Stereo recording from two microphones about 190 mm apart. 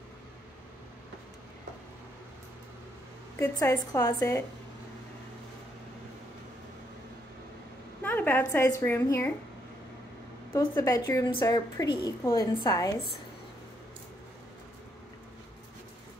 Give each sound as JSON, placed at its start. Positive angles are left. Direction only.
{"t": 3.3, "sound": "a woman's voice", "side_deg": 15}
{"t": 8.0, "sound": "a woman's voice", "side_deg": 10}
{"t": 10.6, "sound": "a woman's voice", "side_deg": 20}